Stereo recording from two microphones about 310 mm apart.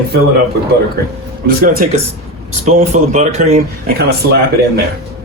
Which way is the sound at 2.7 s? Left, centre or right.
Right.